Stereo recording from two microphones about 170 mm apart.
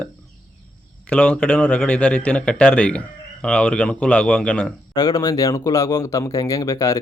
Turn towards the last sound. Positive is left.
turn(degrees=20)  # may be behind; listen again after turning